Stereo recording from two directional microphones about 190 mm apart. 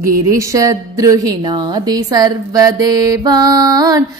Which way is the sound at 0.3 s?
15° right (ahead or behind).